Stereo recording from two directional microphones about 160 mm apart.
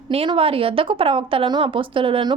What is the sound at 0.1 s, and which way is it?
A woman's voice, 35° right (ahead or behind).